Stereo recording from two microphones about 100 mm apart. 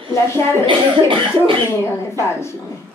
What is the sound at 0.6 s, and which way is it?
Speech, 55° right (ahead or behind).